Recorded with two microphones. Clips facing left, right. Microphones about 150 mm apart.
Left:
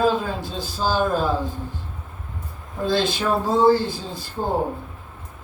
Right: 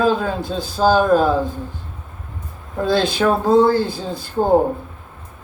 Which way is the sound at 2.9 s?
60° right (ahead or behind).